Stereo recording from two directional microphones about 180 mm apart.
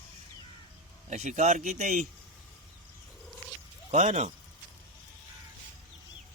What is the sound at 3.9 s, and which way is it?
Speech, 40° right (ahead or behind).